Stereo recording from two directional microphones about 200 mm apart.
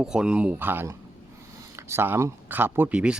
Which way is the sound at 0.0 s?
5° right (ahead or behind).